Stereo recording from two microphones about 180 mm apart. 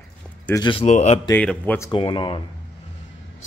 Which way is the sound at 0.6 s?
30° left (ahead or behind).